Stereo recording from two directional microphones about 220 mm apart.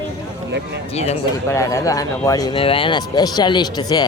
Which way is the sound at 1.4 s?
15° left (ahead or behind).